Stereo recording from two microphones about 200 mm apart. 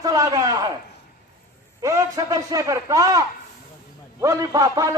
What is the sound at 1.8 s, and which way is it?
A man's voice, 15° right (ahead or behind).